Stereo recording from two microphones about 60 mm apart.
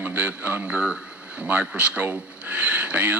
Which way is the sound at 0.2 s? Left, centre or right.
Centre.